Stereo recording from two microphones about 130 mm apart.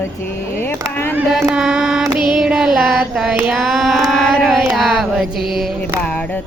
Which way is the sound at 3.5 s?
Centre (ahead or behind).